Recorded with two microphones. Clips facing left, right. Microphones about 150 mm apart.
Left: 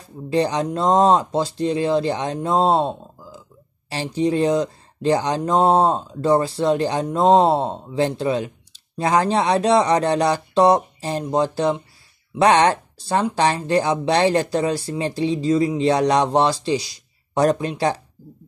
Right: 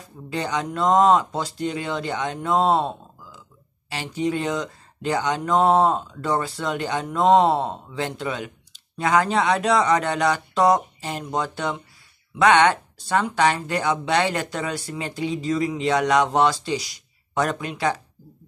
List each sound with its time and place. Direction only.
0.3 s speech: 35° left (ahead or behind)